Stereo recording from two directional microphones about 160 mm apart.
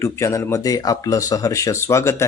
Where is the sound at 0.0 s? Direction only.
20° left (ahead or behind).